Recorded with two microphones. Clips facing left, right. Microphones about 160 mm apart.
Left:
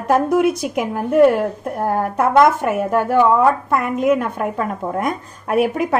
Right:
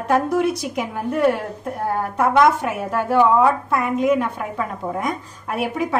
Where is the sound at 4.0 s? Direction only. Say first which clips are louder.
Left 3 dB; 50° left (ahead or behind).